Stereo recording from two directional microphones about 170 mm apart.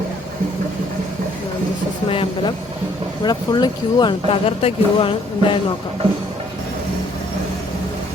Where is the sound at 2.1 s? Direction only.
30° left (ahead or behind).